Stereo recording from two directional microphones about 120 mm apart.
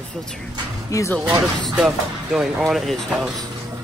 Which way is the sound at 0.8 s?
25° left (ahead or behind).